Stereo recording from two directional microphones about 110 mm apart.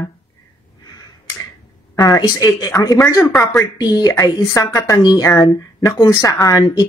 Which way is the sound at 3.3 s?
5° left (ahead or behind).